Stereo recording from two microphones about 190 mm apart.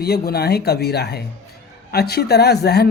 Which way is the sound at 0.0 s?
55° left (ahead or behind).